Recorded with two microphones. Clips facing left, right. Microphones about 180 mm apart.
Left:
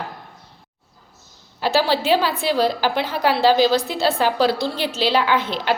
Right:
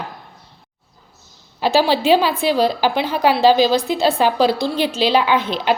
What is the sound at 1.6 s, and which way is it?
A woman's voice, 15° right (ahead or behind).